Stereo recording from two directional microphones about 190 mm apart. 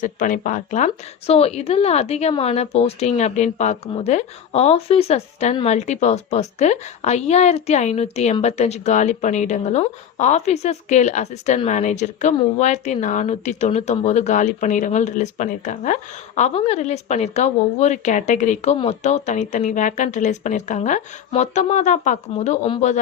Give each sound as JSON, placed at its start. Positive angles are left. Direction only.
{"t": 0.0, "sound": "a woman's voice", "side_deg": 45}